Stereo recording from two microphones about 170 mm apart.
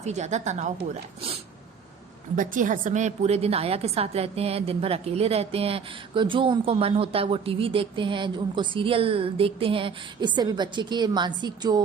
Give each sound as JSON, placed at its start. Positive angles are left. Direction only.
{"t": 0.0, "sound": "a woman's voice", "side_deg": -40}
{"t": 2.3, "sound": "a woman's voice", "side_deg": -50}